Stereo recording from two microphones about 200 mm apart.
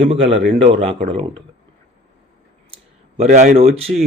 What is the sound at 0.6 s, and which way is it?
Speech, 30° right (ahead or behind).